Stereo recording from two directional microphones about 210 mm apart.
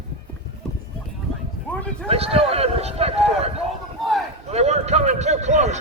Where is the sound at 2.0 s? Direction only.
30° right (ahead or behind).